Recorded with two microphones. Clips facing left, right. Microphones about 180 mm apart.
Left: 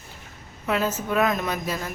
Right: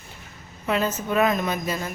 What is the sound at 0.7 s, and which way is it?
A woman's voice, centre (ahead or behind).